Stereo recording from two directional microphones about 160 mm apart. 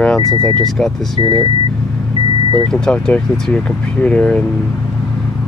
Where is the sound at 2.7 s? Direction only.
5° left (ahead or behind).